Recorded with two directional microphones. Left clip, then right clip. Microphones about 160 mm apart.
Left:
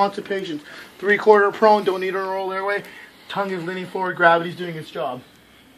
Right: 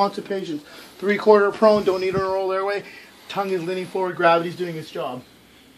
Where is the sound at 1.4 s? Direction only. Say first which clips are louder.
Left 1 dB; 45° right (ahead or behind).